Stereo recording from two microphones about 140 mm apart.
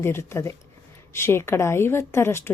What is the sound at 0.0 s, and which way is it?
A woman's voice, 20° left (ahead or behind).